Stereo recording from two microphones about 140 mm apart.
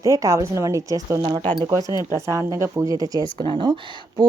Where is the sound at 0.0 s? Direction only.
25° right (ahead or behind).